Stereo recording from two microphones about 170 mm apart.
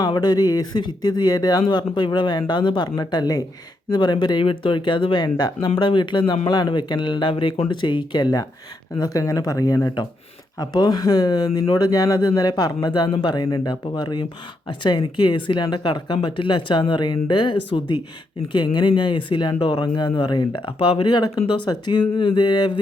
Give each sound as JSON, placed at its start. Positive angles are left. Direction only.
{"t": 0.0, "sound": "speech", "side_deg": 25}